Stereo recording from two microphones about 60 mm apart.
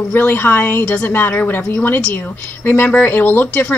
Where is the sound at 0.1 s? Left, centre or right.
Left.